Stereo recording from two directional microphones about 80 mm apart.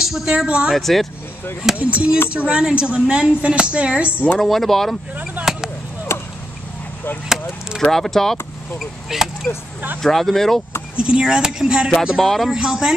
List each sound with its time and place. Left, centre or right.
0.0 s speech: centre
0.7 s speech: centre
4.4 s speech: centre
5.1 s speech: right
5.4 s a sound: centre
6.1 s a sound: left
7.8 s speech: centre
11.0 s speech: centre